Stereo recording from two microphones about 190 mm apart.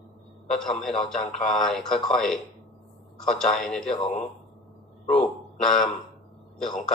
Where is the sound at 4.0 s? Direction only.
40° left (ahead or behind).